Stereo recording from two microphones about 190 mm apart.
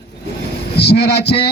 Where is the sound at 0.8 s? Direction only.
60° left (ahead or behind).